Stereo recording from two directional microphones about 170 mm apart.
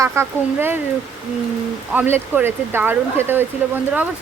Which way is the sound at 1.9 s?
10° right (ahead or behind).